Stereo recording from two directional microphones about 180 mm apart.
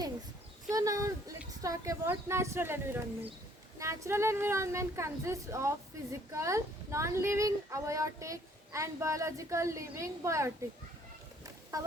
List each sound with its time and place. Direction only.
0.7 s a woman's voice: 20° right (ahead or behind)
11.7 s speech: 20° right (ahead or behind)